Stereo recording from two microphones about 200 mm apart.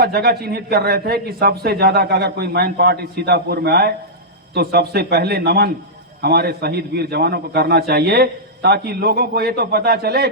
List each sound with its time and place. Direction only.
0.0 s a man's voice: 50° right (ahead or behind)